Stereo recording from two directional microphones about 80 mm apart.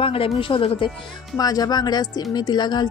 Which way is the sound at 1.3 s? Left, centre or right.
Left.